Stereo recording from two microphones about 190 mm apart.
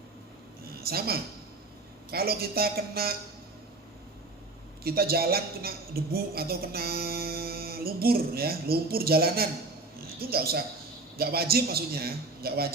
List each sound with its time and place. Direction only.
0.6 s a sound: 55° right (ahead or behind)
2.0 s a woman's voice: 55° right (ahead or behind)
4.8 s a woman's voice: 55° right (ahead or behind)